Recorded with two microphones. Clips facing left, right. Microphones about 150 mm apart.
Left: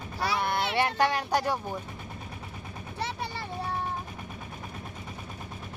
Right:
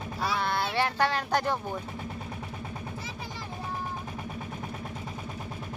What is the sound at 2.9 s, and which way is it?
Vehicle, 70° left (ahead or behind).